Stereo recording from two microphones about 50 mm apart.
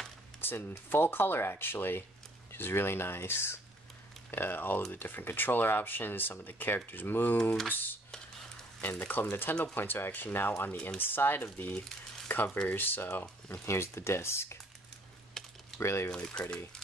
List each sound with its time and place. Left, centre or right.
0.4 s speech: left
4.3 s speech: left
8.9 s speech: left
13.5 s speech: left
15.4 s typing: centre
15.8 s speech: left
16.1 s speech: centre